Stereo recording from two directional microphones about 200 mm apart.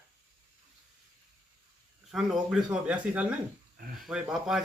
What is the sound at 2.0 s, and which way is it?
A man's voice, centre (ahead or behind).